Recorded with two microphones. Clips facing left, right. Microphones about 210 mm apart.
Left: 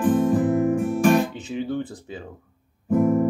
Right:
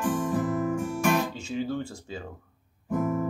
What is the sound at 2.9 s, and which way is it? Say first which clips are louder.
Guitar: left 8 dB; 50° left (ahead or behind).